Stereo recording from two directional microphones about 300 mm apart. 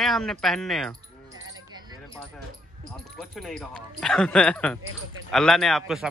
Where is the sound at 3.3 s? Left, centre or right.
Centre.